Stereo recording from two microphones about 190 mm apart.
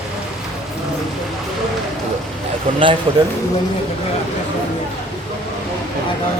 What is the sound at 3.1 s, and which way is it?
Speech, 25° right (ahead or behind).